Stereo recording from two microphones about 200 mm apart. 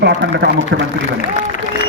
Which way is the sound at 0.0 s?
60° right (ahead or behind).